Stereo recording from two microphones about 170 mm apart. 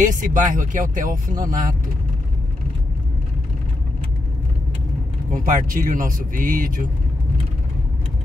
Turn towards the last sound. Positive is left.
turn(degrees=-55)  # may be behind; listen again after turning